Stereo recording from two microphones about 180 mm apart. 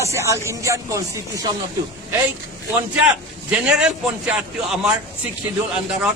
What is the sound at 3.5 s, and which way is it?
Speech, 5° right (ahead or behind).